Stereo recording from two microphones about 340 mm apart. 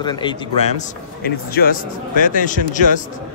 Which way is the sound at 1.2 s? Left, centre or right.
Left.